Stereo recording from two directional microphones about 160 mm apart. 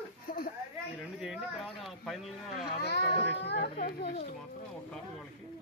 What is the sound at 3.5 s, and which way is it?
Children playing, 75° left (ahead or behind).